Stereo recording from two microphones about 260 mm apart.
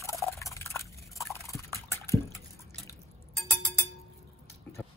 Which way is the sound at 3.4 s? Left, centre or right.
Centre.